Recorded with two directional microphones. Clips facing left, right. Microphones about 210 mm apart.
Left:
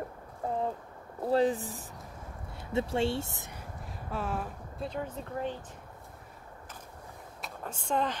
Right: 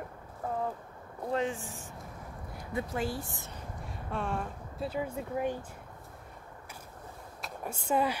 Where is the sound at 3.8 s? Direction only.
5° left (ahead or behind).